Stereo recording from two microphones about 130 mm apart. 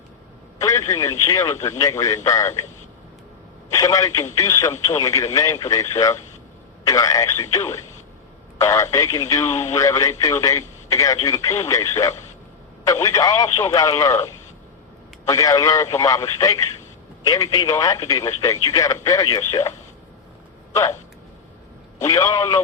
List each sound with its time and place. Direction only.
0.6 s speech: 25° left (ahead or behind)
3.7 s speech: 25° left (ahead or behind)
15.3 s speech: 25° left (ahead or behind)
20.7 s speech: 20° left (ahead or behind)
22.0 s speech: 25° left (ahead or behind)